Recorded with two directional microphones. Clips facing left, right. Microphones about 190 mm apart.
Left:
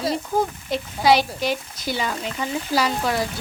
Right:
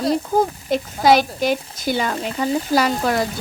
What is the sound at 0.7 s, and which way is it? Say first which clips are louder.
Speech: right 2 dB; 45° right (ahead or behind).